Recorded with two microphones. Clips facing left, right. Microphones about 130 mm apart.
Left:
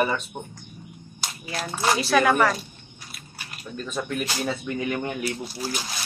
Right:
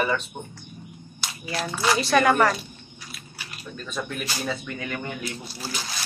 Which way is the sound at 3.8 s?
5° left (ahead or behind).